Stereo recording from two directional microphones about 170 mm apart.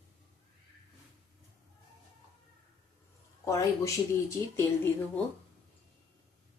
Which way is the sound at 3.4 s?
20° left (ahead or behind).